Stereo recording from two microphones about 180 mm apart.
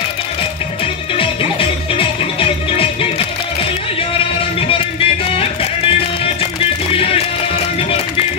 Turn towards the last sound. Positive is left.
turn(degrees=30)  # may be behind; listen again after turning